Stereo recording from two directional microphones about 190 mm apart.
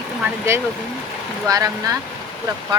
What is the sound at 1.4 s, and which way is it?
Speech, 20° right (ahead or behind).